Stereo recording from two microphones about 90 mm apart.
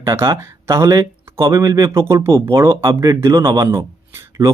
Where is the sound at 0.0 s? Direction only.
30° right (ahead or behind).